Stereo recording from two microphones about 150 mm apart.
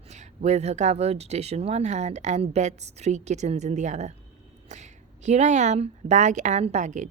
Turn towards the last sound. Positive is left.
turn(degrees=-50)  # may be behind; listen again after turning